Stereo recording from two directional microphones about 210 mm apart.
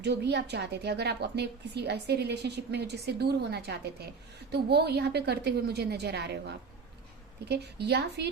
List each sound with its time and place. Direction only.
0.0 s a woman's voice: 55° right (ahead or behind)